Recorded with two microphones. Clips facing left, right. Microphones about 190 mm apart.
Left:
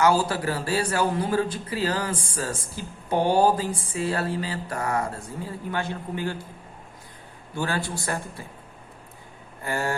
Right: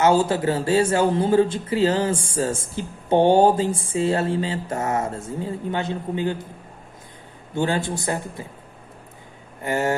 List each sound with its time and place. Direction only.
0.0 s speech: 25° right (ahead or behind)
7.5 s speech: 20° right (ahead or behind)
9.6 s speech: 20° right (ahead or behind)